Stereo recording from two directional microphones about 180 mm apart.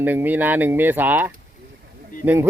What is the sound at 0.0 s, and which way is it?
Speech, 10° right (ahead or behind).